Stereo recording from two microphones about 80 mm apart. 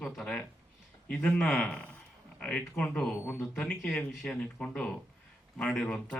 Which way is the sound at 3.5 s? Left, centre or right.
Centre.